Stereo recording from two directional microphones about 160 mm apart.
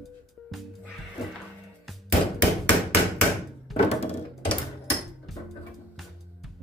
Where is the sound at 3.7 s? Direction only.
Centre (ahead or behind).